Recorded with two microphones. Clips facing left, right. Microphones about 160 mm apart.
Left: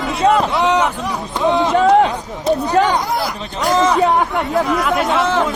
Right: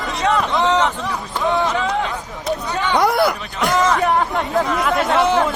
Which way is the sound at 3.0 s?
70° right (ahead or behind).